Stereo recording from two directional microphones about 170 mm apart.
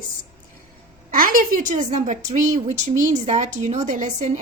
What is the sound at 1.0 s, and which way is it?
A woman's voice, 55° right (ahead or behind).